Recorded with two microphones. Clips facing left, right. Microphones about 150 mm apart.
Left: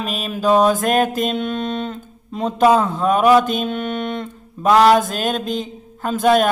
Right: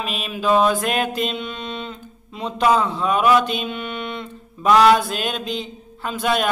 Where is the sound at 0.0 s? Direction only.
40° left (ahead or behind).